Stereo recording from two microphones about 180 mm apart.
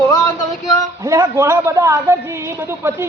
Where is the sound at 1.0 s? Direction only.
15° right (ahead or behind).